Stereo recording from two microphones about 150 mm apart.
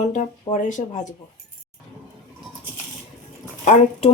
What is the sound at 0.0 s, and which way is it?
Speech, 50° left (ahead or behind).